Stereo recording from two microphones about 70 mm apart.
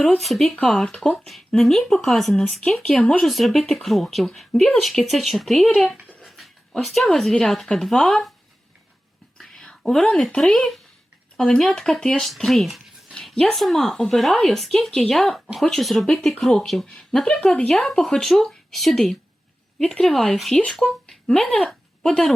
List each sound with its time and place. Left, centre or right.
0.2 s speech: centre
1.1 s speech: centre
6.2 s pant: centre
6.8 s speech: centre
9.4 s speech: centre
13.1 s speech: centre
21.6 s a sound: centre